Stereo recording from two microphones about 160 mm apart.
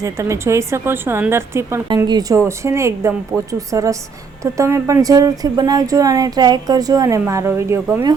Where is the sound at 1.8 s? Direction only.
25° right (ahead or behind).